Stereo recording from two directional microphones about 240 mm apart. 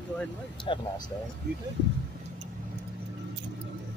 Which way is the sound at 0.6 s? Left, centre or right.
Centre.